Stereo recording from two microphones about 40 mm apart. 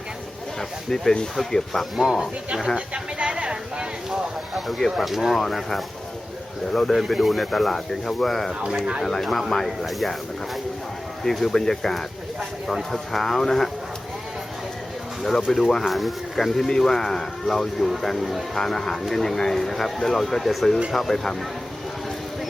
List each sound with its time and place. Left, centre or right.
0.9 s speech: centre
2.0 s speech: centre
2.7 s a sound: right
4.5 s speech: centre
7.1 s speech: centre
11.2 s speech: centre
12.4 s speech: centre
15.5 s speech: centre